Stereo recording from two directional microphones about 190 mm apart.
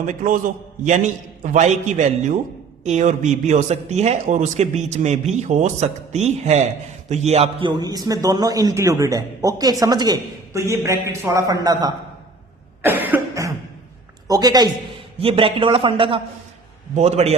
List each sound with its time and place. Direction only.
0.0 s a man's voice: 45° right (ahead or behind); by 11.9 s 20° right (ahead or behind)
12.8 s cough: 10° right (ahead or behind)
14.3 s a woman's voice: 20° right (ahead or behind)